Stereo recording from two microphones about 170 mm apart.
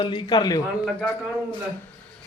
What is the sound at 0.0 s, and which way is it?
Speech, 25° left (ahead or behind).